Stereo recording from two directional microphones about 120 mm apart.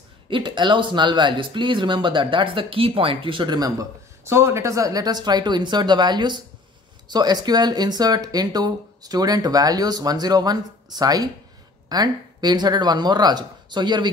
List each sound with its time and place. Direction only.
0.3 s speech: 40° right (ahead or behind)